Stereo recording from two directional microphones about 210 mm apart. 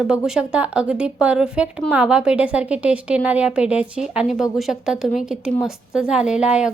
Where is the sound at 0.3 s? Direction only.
5° right (ahead or behind).